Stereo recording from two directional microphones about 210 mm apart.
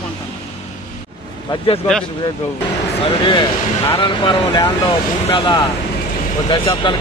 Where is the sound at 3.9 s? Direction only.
20° left (ahead or behind).